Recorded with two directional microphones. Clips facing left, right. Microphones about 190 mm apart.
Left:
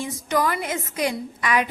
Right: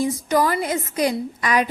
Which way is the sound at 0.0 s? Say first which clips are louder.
Right 4 dB; 35° right (ahead or behind).